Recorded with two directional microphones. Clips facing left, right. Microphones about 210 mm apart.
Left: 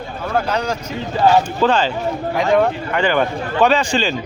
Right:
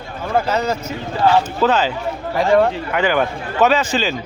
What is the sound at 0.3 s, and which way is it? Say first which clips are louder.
Speech: right 2 dB; 5° right (ahead or behind).